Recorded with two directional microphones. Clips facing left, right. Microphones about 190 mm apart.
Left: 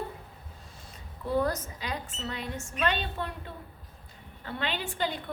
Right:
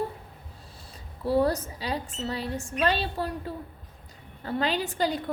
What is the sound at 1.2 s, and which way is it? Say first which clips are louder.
A woman's voice: right 4 dB; 30° right (ahead or behind).